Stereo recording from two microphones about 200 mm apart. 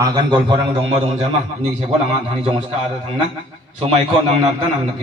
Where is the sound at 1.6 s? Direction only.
30° right (ahead or behind).